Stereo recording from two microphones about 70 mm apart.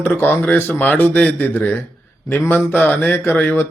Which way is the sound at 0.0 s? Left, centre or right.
Left.